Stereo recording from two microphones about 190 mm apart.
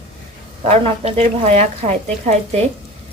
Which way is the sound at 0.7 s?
30° right (ahead or behind).